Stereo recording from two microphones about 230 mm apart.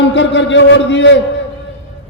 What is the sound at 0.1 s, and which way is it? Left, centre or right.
A man's voice, left.